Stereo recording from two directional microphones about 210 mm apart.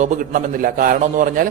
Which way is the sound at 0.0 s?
40° right (ahead or behind).